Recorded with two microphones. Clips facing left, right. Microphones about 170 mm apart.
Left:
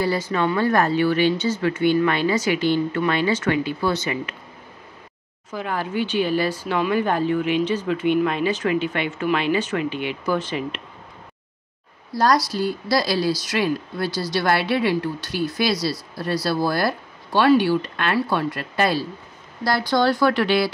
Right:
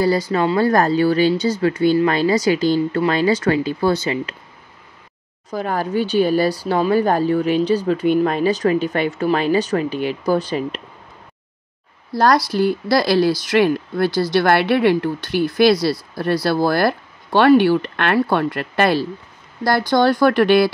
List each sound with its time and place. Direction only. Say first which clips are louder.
0.0 s speech: right 4 dB; 35° right (ahead or behind)
5.5 s speech: right 5 dB; 40° right (ahead or behind)
12.1 s speech: right 3 dB; 55° right (ahead or behind)
19.9 s speech: right 4 dB; 50° right (ahead or behind)